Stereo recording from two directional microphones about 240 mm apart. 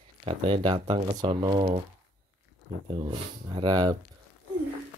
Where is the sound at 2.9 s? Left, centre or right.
Centre.